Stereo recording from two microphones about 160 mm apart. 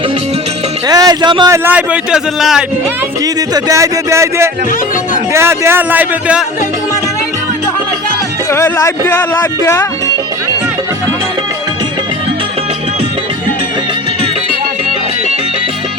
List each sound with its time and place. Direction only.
0.9 s a man's voice: 25° right (ahead or behind); by 2.6 s 5° right (ahead or behind)
3.5 s a man's voice: 20° right (ahead or behind)
8.4 s speech: 20° left (ahead or behind)